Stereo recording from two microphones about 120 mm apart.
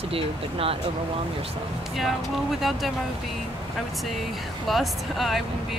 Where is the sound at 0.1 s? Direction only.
50° right (ahead or behind).